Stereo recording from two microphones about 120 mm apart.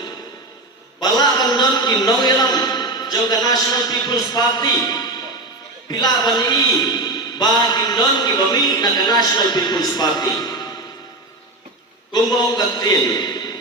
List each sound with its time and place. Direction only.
0.9 s a man's voice: 35° left (ahead or behind)
12.1 s a man's voice: 35° left (ahead or behind)